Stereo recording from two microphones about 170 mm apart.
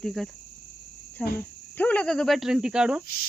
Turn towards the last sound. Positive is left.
turn(degrees=-5)  # may be behind; listen again after turning